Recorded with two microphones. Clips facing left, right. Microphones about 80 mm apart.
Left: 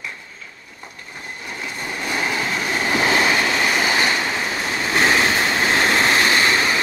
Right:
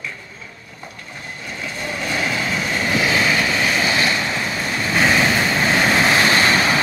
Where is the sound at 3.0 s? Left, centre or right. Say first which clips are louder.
Left 1 dB; left.